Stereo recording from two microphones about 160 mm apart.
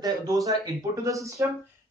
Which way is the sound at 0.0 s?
20° right (ahead or behind).